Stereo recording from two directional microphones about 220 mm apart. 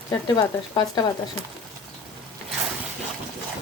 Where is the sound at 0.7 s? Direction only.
20° left (ahead or behind).